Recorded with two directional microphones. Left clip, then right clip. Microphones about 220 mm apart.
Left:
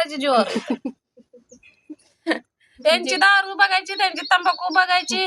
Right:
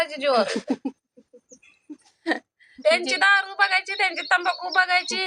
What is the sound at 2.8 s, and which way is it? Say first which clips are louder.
A woman's voice: left 3 dB; 10° left (ahead or behind).